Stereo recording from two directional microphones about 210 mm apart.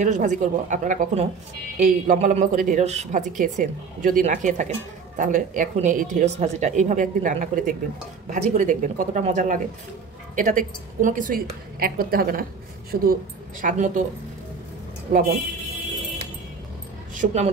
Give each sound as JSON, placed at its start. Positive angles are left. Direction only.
{"t": 0.0, "sound": "speech", "side_deg": -35}
{"t": 15.1, "sound": "speech", "side_deg": -40}
{"t": 17.1, "sound": "speech", "side_deg": -35}